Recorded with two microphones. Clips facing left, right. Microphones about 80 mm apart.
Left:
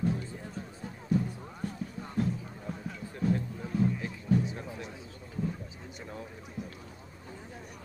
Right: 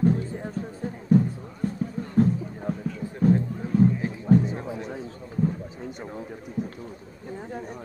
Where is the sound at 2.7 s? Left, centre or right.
Right.